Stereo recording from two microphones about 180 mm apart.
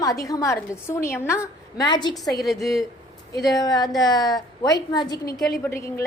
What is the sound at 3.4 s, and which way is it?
A woman's voice, 20° left (ahead or behind).